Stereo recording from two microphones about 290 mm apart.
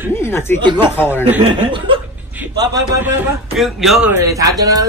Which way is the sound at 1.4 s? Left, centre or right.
Centre.